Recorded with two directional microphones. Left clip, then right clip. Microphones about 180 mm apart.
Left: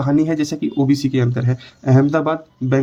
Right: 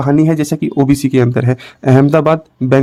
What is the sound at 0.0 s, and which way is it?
Speech, 40° right (ahead or behind).